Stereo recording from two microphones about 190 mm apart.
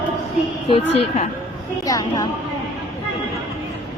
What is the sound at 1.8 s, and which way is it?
Speech, 20° left (ahead or behind).